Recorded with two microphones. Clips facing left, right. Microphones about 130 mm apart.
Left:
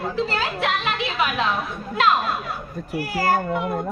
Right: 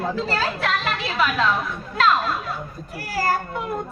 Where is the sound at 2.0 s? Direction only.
40° right (ahead or behind).